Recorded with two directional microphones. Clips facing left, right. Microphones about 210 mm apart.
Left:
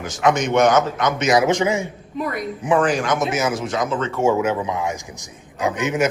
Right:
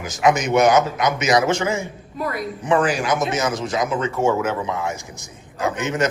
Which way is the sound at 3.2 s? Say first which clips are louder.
Left 1 dB; 5° left (ahead or behind).